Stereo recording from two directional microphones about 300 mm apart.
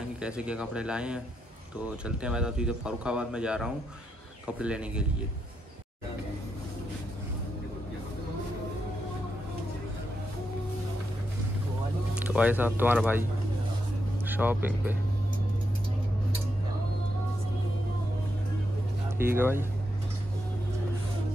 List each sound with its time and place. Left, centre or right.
0.2 s speech: centre
12.2 s speech: centre
14.2 s speech: centre
19.0 s speech: centre